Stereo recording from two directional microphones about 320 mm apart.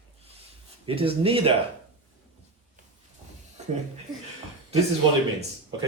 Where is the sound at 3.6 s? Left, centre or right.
Right.